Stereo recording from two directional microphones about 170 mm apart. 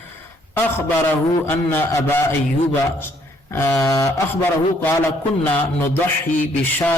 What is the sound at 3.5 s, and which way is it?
Speech, 15° left (ahead or behind).